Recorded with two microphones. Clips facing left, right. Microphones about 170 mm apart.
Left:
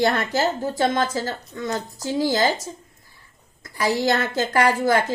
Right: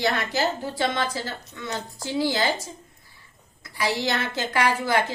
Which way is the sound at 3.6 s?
45° left (ahead or behind).